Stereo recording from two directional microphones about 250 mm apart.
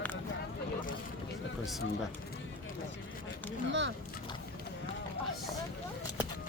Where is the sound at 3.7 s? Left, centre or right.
Right.